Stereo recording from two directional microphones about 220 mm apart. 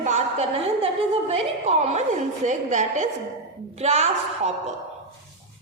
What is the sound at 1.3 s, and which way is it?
A woman's voice, 30° right (ahead or behind).